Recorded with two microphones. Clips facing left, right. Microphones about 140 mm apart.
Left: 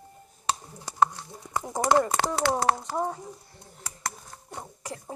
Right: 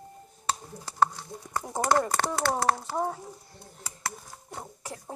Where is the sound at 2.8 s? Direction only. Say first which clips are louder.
Left 1 dB; centre (ahead or behind).